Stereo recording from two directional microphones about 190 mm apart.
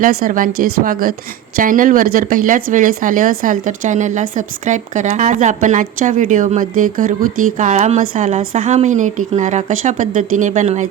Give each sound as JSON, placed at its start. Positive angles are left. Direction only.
{"t": 0.0, "sound": "speech", "side_deg": -50}